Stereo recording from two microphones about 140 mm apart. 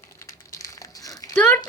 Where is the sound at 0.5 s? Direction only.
25° left (ahead or behind).